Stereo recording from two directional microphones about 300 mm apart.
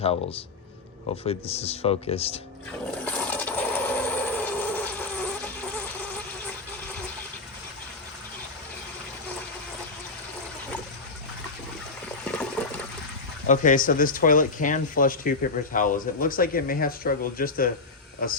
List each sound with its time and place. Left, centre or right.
0.0 s speech: centre
3.0 s coin: centre
12.2 s water: centre
13.5 s speech: left